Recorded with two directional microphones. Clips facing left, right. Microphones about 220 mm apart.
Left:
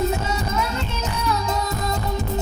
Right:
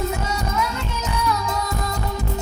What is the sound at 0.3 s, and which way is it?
Music, 25° left (ahead or behind).